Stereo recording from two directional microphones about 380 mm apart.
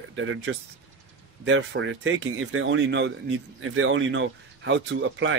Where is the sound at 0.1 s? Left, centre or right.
Right.